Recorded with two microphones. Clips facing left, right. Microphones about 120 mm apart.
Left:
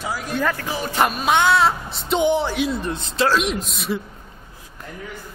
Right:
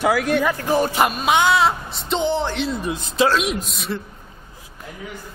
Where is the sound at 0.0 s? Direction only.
70° right (ahead or behind).